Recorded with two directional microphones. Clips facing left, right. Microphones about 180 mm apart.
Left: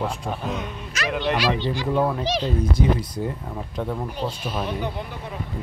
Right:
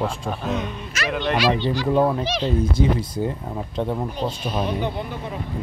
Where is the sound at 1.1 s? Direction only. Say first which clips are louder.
Even; 10° left (ahead or behind).